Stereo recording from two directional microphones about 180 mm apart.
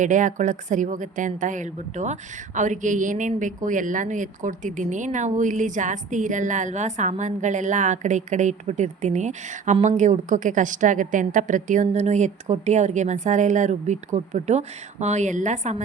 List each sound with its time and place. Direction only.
0.0 s speech: 45° right (ahead or behind)